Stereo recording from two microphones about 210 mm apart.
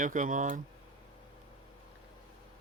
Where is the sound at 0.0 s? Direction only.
40° right (ahead or behind).